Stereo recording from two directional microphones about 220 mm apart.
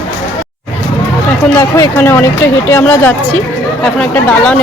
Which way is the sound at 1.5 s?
15° left (ahead or behind).